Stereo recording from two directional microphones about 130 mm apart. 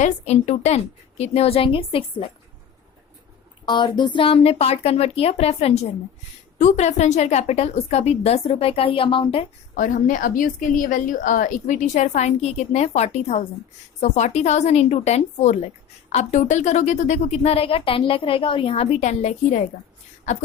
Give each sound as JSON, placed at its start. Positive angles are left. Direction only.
{"t": 0.0, "sound": "a woman's voice", "side_deg": 65}
{"t": 3.7, "sound": "a woman's voice", "side_deg": 35}
{"t": 9.7, "sound": "a woman's voice", "side_deg": 85}